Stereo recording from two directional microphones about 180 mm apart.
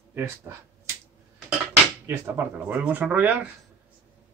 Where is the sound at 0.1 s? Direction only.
15° right (ahead or behind).